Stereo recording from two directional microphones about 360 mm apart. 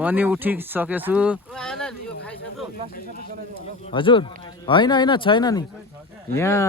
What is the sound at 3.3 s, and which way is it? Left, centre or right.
Speech, right.